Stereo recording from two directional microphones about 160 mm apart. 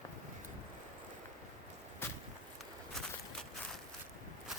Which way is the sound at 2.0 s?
15° left (ahead or behind).